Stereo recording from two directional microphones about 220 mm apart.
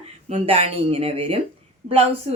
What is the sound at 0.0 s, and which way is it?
A woman's voice, 25° right (ahead or behind).